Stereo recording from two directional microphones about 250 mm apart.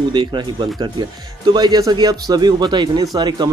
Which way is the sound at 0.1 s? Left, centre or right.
Centre.